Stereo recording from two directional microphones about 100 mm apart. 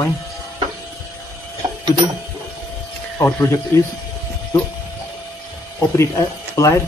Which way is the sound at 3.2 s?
25° left (ahead or behind).